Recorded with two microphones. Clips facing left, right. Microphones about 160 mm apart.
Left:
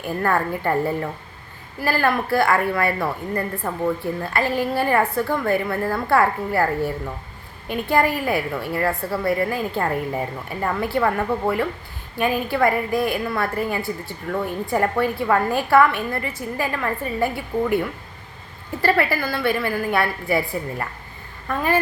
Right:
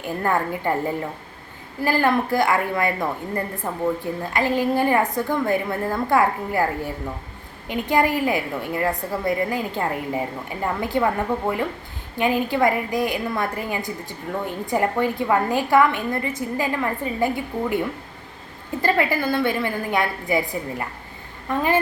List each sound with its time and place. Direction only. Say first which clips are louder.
0.0 s a woman's voice: left 1 dB; 15° right (ahead or behind)
18.8 s a woman's voice: left 1 dB; 20° right (ahead or behind)